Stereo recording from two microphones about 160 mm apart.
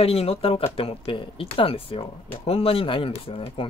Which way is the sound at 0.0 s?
40° left (ahead or behind).